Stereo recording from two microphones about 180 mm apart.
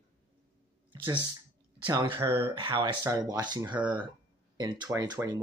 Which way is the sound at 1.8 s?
25° right (ahead or behind).